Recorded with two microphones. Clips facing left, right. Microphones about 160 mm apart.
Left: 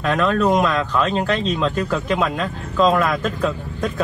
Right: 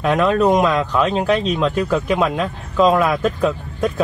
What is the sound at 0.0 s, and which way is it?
Speech, 10° right (ahead or behind).